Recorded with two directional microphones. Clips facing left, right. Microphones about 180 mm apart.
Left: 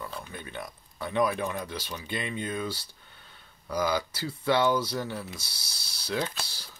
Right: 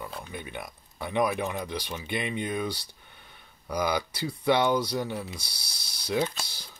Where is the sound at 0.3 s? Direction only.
15° right (ahead or behind).